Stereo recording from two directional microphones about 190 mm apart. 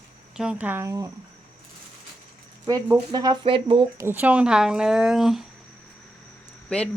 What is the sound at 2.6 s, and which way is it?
Speech, 20° right (ahead or behind).